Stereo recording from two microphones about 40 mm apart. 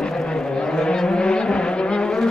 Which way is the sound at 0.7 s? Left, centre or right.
Centre.